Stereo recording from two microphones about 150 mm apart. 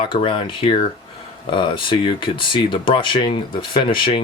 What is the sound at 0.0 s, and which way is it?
Speech, 35° left (ahead or behind).